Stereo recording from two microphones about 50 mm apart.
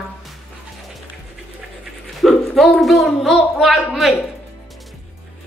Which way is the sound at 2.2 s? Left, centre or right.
Centre.